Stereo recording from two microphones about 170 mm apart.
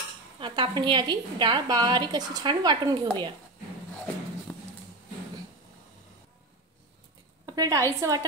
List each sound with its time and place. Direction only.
0.4 s a woman's voice: 25° right (ahead or behind)
4.5 s a sound: 5° left (ahead or behind)
7.4 s a woman's voice: 20° right (ahead or behind)